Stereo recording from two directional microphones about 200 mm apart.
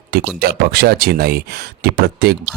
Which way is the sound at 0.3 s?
55° right (ahead or behind).